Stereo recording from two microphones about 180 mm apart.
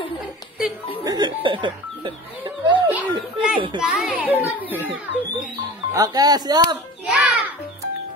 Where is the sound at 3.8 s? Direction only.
5° right (ahead or behind).